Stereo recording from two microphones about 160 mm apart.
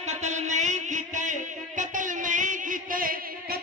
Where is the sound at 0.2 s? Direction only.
45° right (ahead or behind).